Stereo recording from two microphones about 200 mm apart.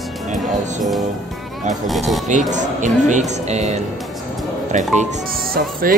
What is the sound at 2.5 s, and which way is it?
Speech, 40° right (ahead or behind).